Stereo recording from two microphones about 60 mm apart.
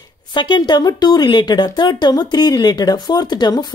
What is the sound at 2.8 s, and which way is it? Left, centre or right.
Speech, left.